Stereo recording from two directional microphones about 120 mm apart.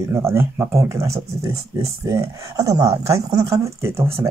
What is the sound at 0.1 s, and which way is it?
Speech, 20° right (ahead or behind).